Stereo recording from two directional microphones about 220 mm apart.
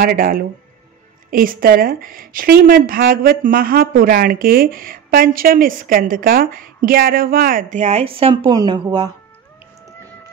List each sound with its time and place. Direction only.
0.0 s a woman's voice: 40° right (ahead or behind); by 9.1 s 15° right (ahead or behind)